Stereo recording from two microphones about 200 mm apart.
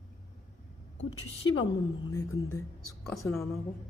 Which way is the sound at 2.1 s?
15° left (ahead or behind).